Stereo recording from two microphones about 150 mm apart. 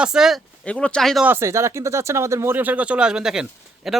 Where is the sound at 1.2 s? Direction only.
15° right (ahead or behind).